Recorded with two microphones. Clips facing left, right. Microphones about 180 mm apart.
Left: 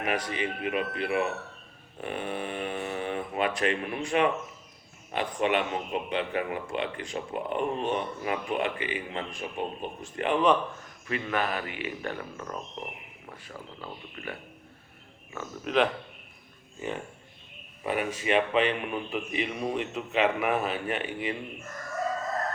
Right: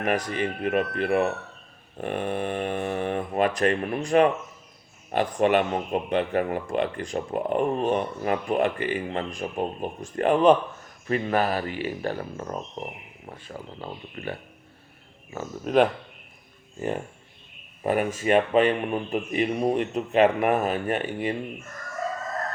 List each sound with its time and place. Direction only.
0.0 s speech: 45° right (ahead or behind)
17.8 s speech: 45° right (ahead or behind)